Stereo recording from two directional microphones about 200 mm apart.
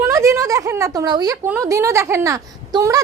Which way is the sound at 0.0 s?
15° right (ahead or behind).